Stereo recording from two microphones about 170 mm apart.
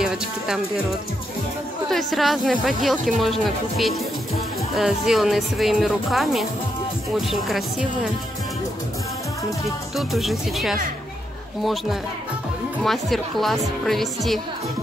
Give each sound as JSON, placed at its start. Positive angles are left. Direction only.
{"t": 0.0, "sound": "speech", "side_deg": -5}
{"t": 1.9, "sound": "speech", "side_deg": 0}
{"t": 9.9, "sound": "speech", "side_deg": 0}